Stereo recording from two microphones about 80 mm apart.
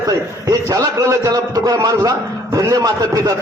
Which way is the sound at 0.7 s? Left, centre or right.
Right.